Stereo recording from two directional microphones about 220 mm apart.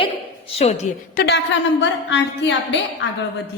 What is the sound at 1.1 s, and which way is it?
Speech, 50° left (ahead or behind).